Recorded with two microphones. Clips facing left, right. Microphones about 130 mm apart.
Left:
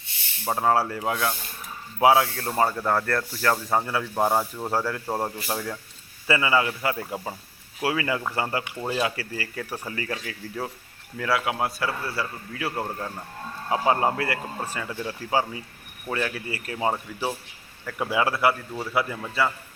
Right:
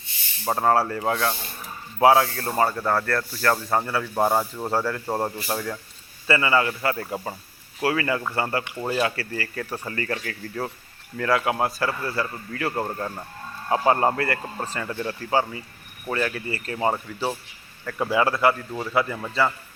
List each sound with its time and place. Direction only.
0.0 s a sound: 65° left (ahead or behind)
0.5 s speech: 10° left (ahead or behind)
3.5 s a man's voice: centre (ahead or behind)
6.2 s a man's voice: 15° left (ahead or behind)
12.8 s speech: 5° right (ahead or behind)
13.7 s speech: 10° left (ahead or behind)
16.7 s a man's voice: centre (ahead or behind)